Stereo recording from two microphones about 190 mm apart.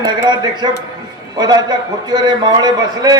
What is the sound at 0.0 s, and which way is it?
A man's voice, 20° right (ahead or behind).